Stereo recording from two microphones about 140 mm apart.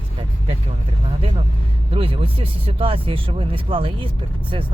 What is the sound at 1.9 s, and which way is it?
Speech, 40° right (ahead or behind).